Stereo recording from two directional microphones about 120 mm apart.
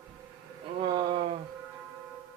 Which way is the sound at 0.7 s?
45° right (ahead or behind).